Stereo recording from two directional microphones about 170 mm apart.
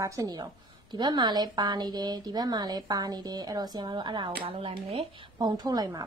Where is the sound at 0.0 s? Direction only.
20° right (ahead or behind); by 5.0 s 35° right (ahead or behind).